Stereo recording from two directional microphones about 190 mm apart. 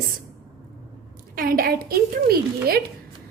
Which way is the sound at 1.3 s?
50° right (ahead or behind).